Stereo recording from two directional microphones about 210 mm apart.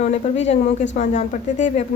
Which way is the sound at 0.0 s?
35° left (ahead or behind).